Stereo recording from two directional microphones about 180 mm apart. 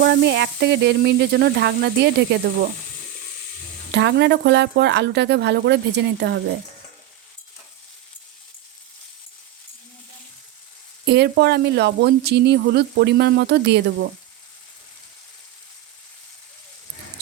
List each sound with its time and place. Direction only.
0.0 s speech: 70° right (ahead or behind)
3.9 s speech: 70° right (ahead or behind)
11.0 s speech: 70° right (ahead or behind)